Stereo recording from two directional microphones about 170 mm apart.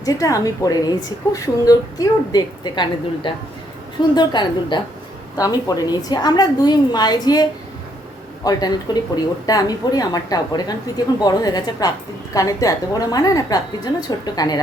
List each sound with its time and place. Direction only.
0.0 s a woman's voice: 20° left (ahead or behind)
8.4 s a woman's voice: 25° left (ahead or behind)